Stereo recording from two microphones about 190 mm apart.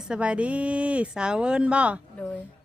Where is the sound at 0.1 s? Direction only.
5° right (ahead or behind).